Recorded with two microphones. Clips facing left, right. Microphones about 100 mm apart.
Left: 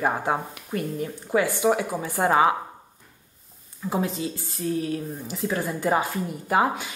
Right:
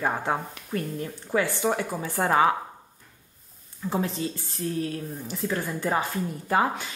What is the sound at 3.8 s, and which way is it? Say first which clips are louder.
Speech: left 1 dB; 10° left (ahead or behind).